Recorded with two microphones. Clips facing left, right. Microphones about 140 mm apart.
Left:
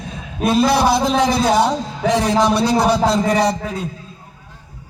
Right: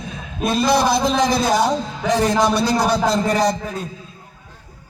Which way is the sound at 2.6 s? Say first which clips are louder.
Left 3 dB; 65° left (ahead or behind).